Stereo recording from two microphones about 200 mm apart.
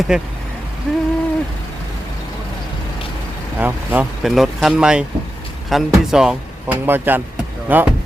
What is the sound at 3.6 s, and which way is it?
Speech, 10° right (ahead or behind).